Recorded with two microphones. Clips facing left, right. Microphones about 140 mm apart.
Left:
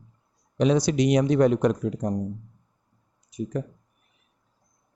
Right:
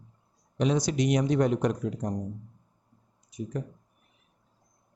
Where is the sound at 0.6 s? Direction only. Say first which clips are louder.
Left 5 dB; 85° left.